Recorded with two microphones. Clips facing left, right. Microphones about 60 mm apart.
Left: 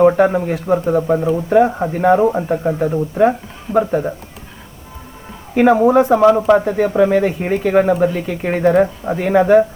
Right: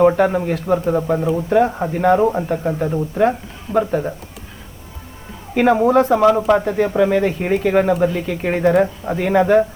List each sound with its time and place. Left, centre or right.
0.0 s a man's voice: centre
5.5 s a man's voice: centre